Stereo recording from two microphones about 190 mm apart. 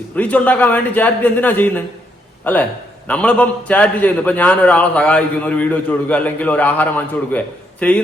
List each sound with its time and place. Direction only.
0.2 s a man's voice: 10° left (ahead or behind)